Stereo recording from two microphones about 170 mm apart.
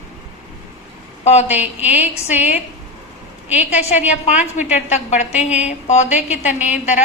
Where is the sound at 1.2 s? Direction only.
40° left (ahead or behind).